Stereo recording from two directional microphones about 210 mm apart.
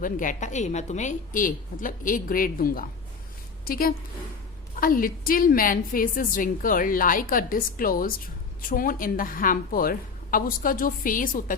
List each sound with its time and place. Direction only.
0.0 s a woman's voice: 40° left (ahead or behind)